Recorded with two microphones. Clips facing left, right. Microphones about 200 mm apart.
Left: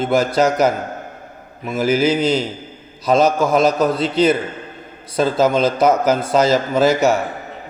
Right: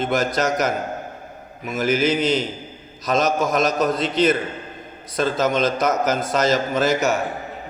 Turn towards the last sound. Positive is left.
turn(degrees=10)  # may be behind; listen again after turning